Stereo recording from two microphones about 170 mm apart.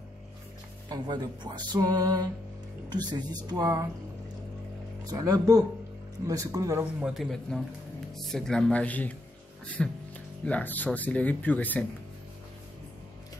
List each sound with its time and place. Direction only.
0.8 s speech: 25° right (ahead or behind)
5.0 s speech: 20° right (ahead or behind)
6.8 s speech: 5° right (ahead or behind); by 11.8 s 10° left (ahead or behind)